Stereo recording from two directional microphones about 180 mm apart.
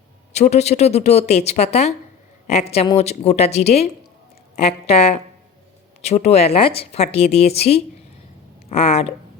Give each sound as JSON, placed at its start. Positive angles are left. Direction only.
{"t": 0.3, "sound": "a woman's voice", "side_deg": 35}